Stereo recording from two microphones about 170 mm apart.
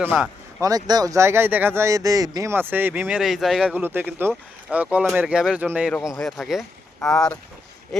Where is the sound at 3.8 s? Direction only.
10° right (ahead or behind).